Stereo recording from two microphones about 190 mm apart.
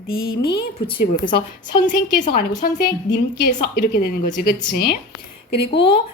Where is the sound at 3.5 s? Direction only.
50° left (ahead or behind).